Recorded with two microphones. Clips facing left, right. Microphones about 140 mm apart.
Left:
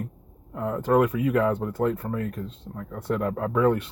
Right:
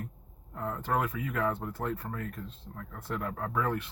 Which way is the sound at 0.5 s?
70° left (ahead or behind).